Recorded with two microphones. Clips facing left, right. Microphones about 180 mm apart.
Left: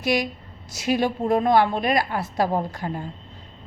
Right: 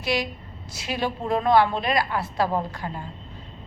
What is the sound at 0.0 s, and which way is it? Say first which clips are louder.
A woman's voice: left 3 dB; 45° left (ahead or behind).